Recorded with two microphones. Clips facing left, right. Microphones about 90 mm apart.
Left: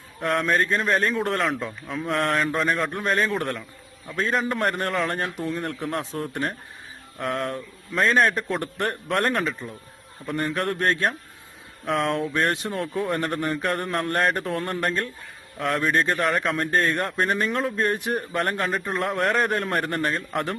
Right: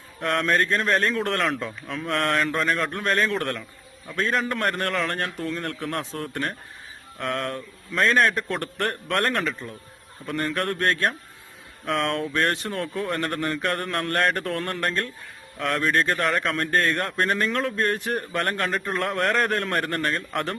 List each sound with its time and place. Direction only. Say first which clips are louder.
0.2 s speech: even; 5° left (ahead or behind)
7.2 s speech: left 1 dB; 5° left (ahead or behind)
16.2 s speech: left 1 dB; 5° left (ahead or behind)
16.6 s speech: even; 15° left (ahead or behind)
18.1 s speech: left 1 dB; 5° left (ahead or behind)